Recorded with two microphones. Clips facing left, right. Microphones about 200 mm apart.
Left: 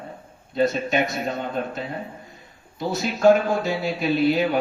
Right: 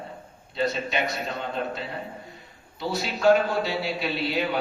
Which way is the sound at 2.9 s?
45° left (ahead or behind).